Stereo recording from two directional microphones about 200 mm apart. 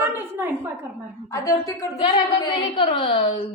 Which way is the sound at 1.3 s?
15° left (ahead or behind).